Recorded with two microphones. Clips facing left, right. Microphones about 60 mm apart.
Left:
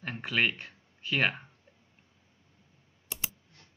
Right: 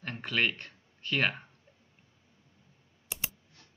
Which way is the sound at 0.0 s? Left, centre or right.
Centre.